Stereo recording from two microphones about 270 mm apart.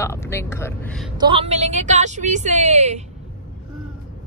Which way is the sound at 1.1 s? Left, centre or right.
Centre.